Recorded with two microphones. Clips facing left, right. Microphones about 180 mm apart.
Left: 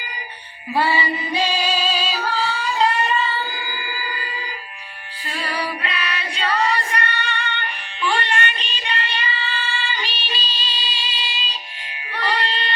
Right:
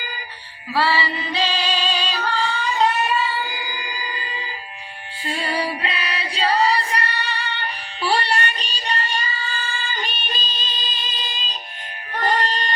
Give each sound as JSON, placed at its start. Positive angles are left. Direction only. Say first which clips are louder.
{"t": 0.7, "sound": "female singing", "louder": "left 1 dB", "side_deg": 20}
{"t": 5.3, "sound": "female singing", "louder": "right 2 dB", "side_deg": -25}
{"t": 12.1, "sound": "music", "louder": "right 2 dB", "side_deg": -45}